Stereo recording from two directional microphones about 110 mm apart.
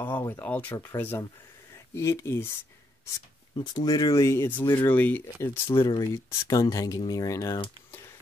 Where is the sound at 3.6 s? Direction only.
35° left (ahead or behind).